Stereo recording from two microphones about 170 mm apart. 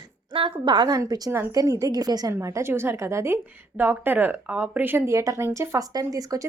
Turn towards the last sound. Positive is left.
turn(degrees=-20)  # may be behind; listen again after turning